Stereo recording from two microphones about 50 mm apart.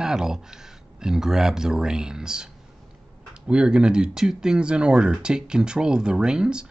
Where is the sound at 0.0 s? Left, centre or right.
Centre.